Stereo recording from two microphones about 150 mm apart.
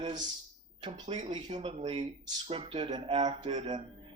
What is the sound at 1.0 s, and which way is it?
Speech, 50° right (ahead or behind).